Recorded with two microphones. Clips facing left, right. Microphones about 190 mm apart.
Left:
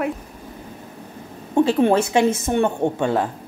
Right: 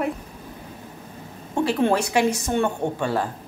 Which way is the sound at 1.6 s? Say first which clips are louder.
Even; 25° left (ahead or behind).